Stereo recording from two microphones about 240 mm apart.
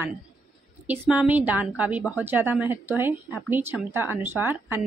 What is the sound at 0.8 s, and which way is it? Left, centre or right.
Speech, centre.